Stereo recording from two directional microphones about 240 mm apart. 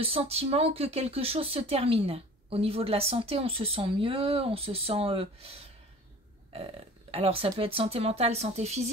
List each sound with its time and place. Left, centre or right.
0.0 s speech: right